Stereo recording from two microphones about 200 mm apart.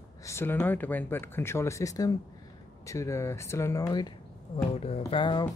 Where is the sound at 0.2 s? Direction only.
15° left (ahead or behind).